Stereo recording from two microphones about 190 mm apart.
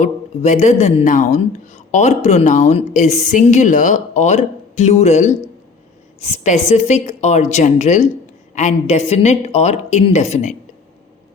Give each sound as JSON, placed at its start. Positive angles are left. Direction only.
{"t": 0.0, "sound": "speech", "side_deg": 40}